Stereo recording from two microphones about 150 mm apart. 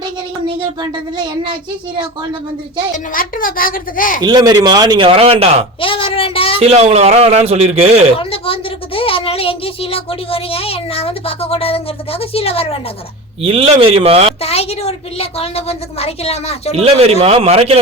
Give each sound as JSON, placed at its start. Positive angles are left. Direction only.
{"t": 0.0, "sound": "child singing", "side_deg": -30}
{"t": 3.1, "sound": "a woman's voice", "side_deg": 70}
{"t": 4.2, "sound": "speech", "side_deg": -30}
{"t": 5.8, "sound": "child singing", "side_deg": 35}
{"t": 6.6, "sound": "speech", "side_deg": -45}
{"t": 8.2, "sound": "speech", "side_deg": 40}
{"t": 13.4, "sound": "speech", "side_deg": -40}
{"t": 14.4, "sound": "a woman's voice", "side_deg": 40}
{"t": 16.7, "sound": "speech", "side_deg": -45}